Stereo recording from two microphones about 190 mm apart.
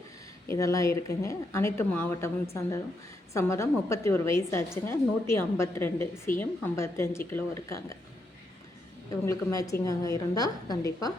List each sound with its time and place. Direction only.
0.4 s a woman's voice: 15° left (ahead or behind)
9.2 s a woman's voice: 15° left (ahead or behind)